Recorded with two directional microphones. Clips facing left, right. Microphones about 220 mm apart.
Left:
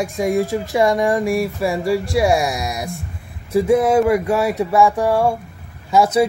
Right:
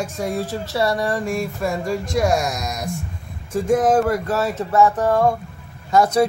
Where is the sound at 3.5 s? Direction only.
10° left (ahead or behind).